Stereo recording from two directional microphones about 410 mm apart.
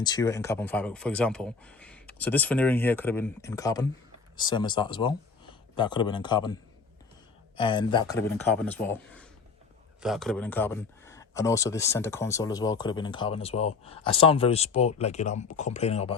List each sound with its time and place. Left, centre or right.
0.0 s speech: centre